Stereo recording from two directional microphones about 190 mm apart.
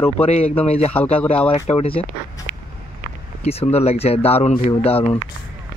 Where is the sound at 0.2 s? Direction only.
35° left (ahead or behind).